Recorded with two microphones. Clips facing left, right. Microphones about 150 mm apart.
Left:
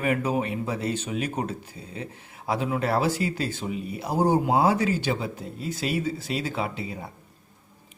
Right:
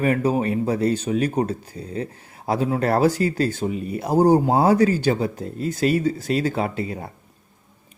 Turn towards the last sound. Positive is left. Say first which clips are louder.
# right 5 dB
turn(degrees=-50)  # may be behind; listen again after turning